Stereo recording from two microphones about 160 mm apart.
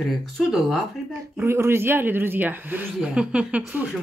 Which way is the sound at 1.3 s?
15° right (ahead or behind).